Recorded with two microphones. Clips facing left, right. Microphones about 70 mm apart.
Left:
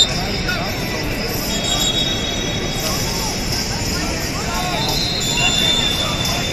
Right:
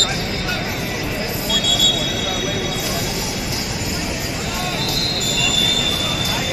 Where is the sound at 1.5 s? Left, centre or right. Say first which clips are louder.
Right 1 dB; right.